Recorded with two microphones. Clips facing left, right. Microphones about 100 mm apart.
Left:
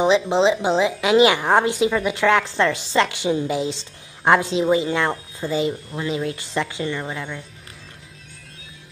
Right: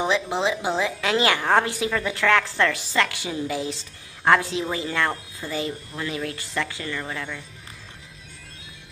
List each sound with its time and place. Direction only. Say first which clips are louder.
0.0 s a woman's voice: left 7 dB; 20° left (ahead or behind)